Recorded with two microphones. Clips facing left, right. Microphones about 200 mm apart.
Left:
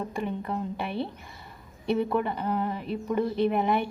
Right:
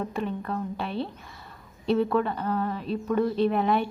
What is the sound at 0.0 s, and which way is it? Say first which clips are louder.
Speech: right 1 dB; 15° left (ahead or behind).